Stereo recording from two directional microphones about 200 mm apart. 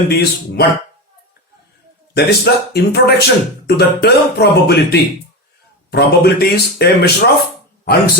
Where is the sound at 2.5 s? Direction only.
55° left (ahead or behind).